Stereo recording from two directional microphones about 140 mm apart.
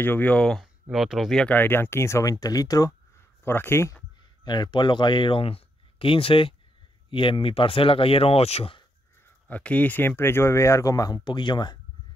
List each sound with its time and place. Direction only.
0.0 s speech: 15° left (ahead or behind)
4.5 s speech: 30° left (ahead or behind)
9.5 s speech: 10° left (ahead or behind); by 11.8 s 30° left (ahead or behind)